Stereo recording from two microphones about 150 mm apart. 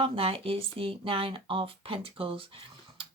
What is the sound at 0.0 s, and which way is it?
Speech, 40° right (ahead or behind).